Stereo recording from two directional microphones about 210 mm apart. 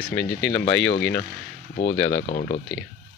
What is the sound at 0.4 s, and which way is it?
Speech, 5° left (ahead or behind).